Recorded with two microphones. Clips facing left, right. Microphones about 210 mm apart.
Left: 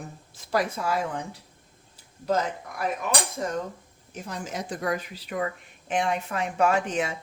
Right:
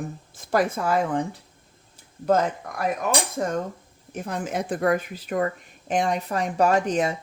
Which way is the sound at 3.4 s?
50° right (ahead or behind).